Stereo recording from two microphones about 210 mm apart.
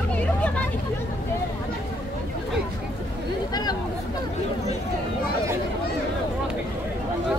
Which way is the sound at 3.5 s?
20° left (ahead or behind).